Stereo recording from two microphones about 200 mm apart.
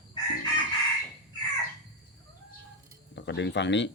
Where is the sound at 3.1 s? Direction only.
60° left (ahead or behind).